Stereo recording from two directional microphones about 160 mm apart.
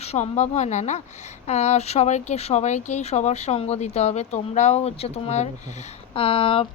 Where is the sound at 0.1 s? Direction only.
45° left (ahead or behind).